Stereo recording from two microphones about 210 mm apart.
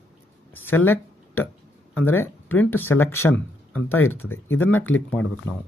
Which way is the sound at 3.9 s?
85° left.